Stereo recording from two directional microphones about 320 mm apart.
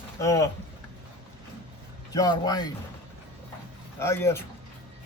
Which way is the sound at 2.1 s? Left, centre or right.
Centre.